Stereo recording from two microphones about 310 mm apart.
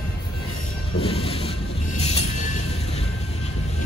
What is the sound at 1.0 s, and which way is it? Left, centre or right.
Music, centre.